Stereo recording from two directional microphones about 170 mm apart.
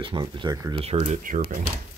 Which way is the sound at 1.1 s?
50° right (ahead or behind).